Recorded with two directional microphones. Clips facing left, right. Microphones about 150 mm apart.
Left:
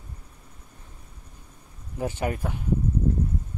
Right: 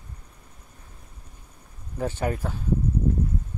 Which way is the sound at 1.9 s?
15° left (ahead or behind).